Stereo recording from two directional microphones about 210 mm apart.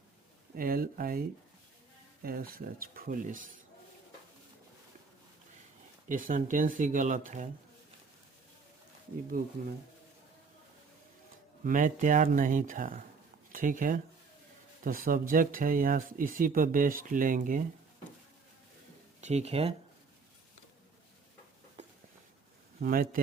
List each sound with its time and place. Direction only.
0.5 s speech: 45° right (ahead or behind)
2.2 s speech: 45° right (ahead or behind)
6.1 s speech: 40° right (ahead or behind)
9.4 s speech: 45° right (ahead or behind)
11.6 s speech: 40° right (ahead or behind)
19.2 s speech: 30° right (ahead or behind)
22.8 s speech: 45° right (ahead or behind)